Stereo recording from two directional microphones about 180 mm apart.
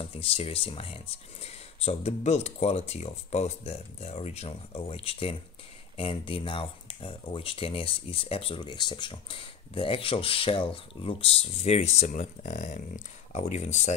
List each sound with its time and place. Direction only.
0.0 s speech: 30° left (ahead or behind)